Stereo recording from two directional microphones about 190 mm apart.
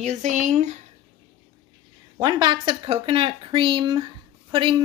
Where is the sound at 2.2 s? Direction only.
25° right (ahead or behind).